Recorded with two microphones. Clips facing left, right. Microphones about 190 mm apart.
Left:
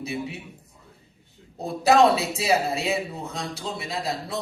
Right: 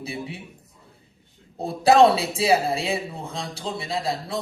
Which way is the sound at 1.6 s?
30° right (ahead or behind).